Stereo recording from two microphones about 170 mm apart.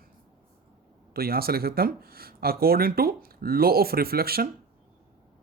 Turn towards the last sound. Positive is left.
turn(degrees=-65)  # may be behind; listen again after turning